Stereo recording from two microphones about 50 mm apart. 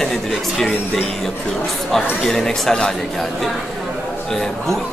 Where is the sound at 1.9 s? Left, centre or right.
Centre.